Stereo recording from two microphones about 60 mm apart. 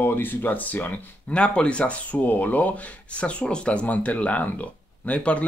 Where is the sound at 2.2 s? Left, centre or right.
Left.